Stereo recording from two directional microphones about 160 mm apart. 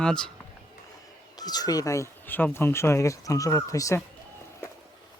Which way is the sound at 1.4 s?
25° left (ahead or behind).